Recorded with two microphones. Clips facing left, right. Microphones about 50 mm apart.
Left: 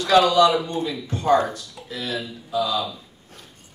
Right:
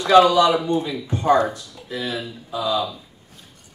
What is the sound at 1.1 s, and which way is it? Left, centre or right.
Speech, right.